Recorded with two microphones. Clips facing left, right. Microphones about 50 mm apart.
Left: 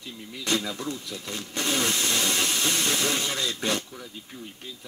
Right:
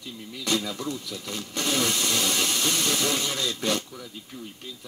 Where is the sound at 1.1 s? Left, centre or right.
Left.